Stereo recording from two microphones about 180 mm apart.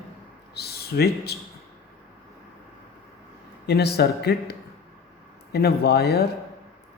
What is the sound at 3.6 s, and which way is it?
Speech, 65° left (ahead or behind).